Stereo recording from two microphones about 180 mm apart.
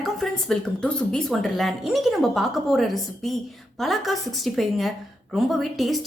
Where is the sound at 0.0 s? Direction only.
Centre (ahead or behind).